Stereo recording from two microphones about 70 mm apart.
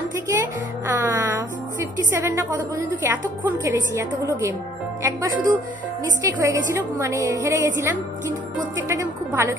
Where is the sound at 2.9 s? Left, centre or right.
Right.